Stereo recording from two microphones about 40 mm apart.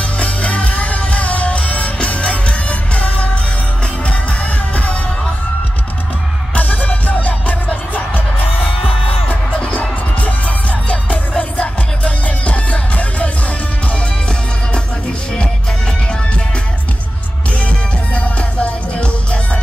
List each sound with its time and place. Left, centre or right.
0.0 s music: left
6.5 s music: left
9.3 s music: left
17.6 s music: left